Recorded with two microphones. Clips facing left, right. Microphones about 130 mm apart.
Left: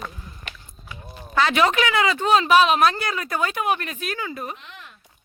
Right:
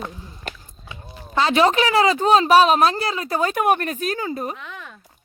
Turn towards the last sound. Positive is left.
turn(degrees=-40)  # may be behind; listen again after turning